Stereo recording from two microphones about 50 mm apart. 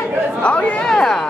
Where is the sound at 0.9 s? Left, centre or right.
Centre.